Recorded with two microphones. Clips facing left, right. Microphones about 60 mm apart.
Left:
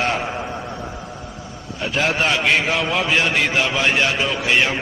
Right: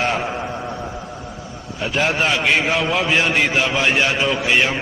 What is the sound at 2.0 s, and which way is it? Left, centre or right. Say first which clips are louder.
A man's voice: even; centre.